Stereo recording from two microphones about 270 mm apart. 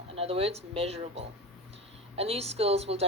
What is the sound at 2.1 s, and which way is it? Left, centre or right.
Speech, right.